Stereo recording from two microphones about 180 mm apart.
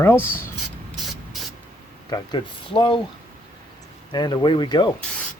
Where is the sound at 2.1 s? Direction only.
25° left (ahead or behind).